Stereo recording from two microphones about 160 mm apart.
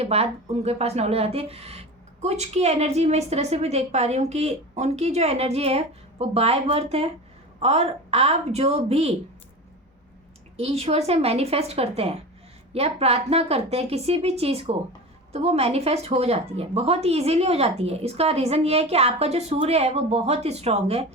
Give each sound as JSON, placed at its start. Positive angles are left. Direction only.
{"t": 0.0, "sound": "a woman's voice", "side_deg": -40}
{"t": 10.6, "sound": "a woman's voice", "side_deg": -40}